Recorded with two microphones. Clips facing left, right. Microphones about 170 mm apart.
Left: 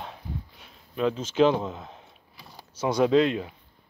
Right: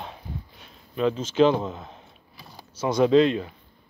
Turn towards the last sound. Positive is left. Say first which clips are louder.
# right 3 dB
turn(degrees=5)  # may be behind; listen again after turning